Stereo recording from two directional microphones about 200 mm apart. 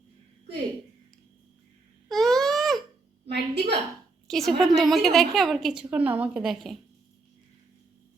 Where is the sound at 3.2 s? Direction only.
55° right (ahead or behind).